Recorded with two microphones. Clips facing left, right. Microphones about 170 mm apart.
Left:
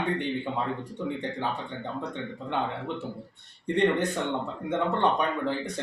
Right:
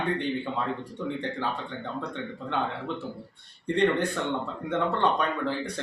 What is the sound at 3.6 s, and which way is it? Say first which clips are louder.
A man's voice: even; 20° left (ahead or behind).